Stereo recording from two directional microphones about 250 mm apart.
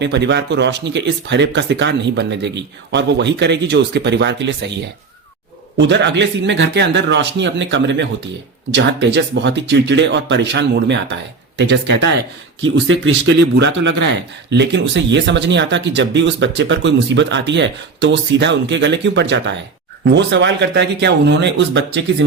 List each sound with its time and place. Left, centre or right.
0.0 s a man's voice: right
5.9 s a man's voice: right